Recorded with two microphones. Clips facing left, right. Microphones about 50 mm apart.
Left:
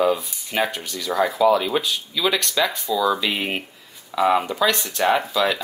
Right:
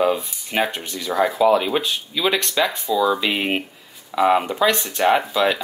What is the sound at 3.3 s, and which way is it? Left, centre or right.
Speech, centre.